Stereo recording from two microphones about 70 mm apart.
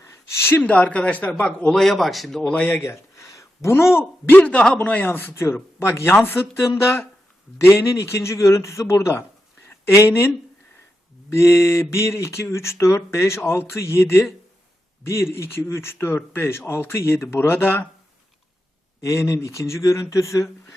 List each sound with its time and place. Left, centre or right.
0.0 s a sound: left
0.6 s speech: left
1.7 s speech: centre
2.4 s speech: centre
2.7 s speech: left
4.4 s speech: centre; by 10.2 s left
11.3 s speech: left
19.0 s speech: left